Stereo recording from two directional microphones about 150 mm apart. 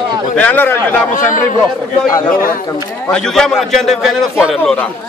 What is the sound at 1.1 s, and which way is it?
Speech, 55° left (ahead or behind).